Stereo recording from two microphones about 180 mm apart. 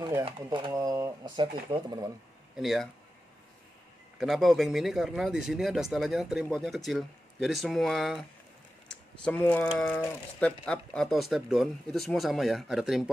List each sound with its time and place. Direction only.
0.2 s speech: 25° right (ahead or behind)
2.5 s speech: centre (ahead or behind)
4.2 s speech: centre (ahead or behind)